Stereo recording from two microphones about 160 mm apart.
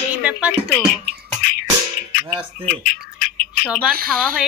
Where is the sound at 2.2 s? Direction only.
30° right (ahead or behind).